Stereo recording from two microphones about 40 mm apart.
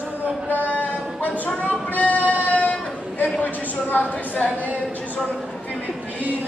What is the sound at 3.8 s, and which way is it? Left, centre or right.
Speech, left.